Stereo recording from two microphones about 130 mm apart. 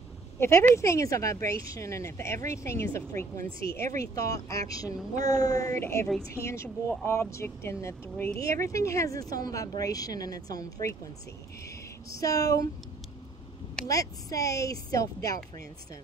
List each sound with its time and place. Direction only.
0.4 s speech: 20° left (ahead or behind)
4.0 s speech: 25° left (ahead or behind)
13.8 s speech: 25° left (ahead or behind)